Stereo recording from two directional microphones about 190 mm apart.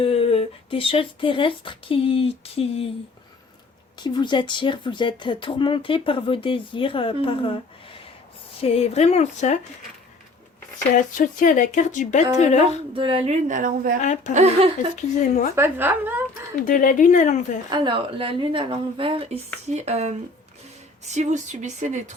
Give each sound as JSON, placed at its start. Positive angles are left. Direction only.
{"t": 0.0, "sound": "speech", "side_deg": 30}
{"t": 4.0, "sound": "speech", "side_deg": 25}
{"t": 10.9, "sound": "speech", "side_deg": 45}
{"t": 12.9, "sound": "a woman's voice", "side_deg": -30}
{"t": 14.0, "sound": "speech", "side_deg": 40}
{"t": 14.3, "sound": "a woman's voice", "side_deg": -35}
{"t": 15.5, "sound": "speech", "side_deg": -10}
{"t": 16.6, "sound": "speech", "side_deg": 45}
{"t": 17.7, "sound": "a woman's voice", "side_deg": -25}